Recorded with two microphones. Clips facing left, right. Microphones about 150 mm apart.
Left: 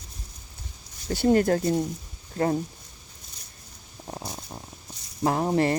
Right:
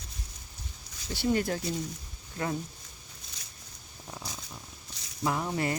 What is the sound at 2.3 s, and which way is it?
Speech, 40° left (ahead or behind).